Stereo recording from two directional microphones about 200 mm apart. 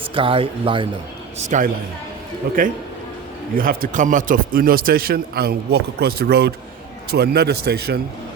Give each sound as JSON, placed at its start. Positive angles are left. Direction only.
{"t": 0.0, "sound": "speech", "side_deg": -25}
{"t": 1.4, "sound": "a woman's voice", "side_deg": -40}
{"t": 3.5, "sound": "a man's voice", "side_deg": -45}